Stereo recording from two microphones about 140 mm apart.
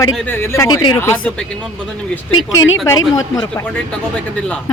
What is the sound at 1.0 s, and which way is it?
Speech, 15° left (ahead or behind).